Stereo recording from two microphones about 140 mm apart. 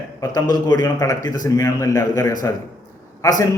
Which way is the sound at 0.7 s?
25° left (ahead or behind).